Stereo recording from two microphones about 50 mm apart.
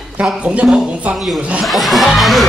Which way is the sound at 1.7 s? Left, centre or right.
Centre.